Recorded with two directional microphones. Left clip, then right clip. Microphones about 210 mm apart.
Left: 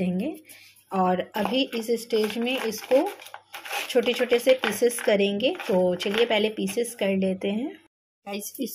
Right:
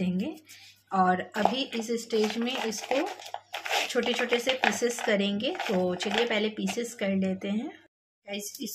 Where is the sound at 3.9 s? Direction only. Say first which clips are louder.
Left 9 dB; 10° left (ahead or behind).